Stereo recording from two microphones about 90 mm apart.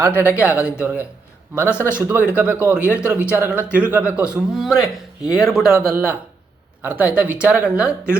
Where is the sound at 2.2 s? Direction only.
15° right (ahead or behind).